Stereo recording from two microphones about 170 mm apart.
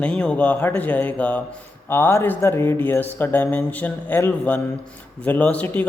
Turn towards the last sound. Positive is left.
turn(degrees=10)  # may be behind; listen again after turning